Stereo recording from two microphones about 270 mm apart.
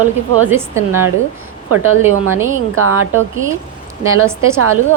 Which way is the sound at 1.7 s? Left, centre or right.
Right.